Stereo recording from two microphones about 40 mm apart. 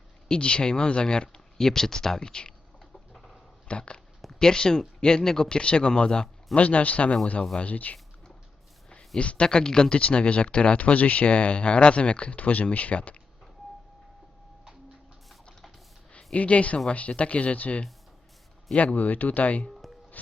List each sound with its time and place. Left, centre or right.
0.3 s speech: left
3.1 s dog: centre
3.7 s speech: left
6.6 s speech: left
8.9 s speech: left
9.9 s speech: left
16.1 s a woman's voice: left